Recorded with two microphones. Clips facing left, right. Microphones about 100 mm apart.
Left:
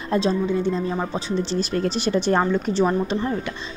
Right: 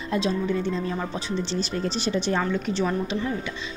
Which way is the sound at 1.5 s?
50° left (ahead or behind).